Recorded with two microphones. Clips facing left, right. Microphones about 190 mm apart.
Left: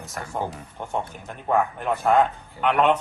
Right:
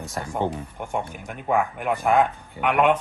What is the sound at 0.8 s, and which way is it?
Speech, 15° right (ahead or behind).